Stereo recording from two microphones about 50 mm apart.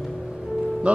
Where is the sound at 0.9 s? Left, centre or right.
Right.